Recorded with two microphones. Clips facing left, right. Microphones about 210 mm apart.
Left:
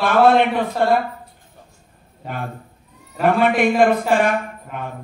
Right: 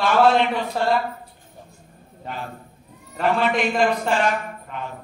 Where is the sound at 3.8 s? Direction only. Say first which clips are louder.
Left 4 dB; 55° left (ahead or behind).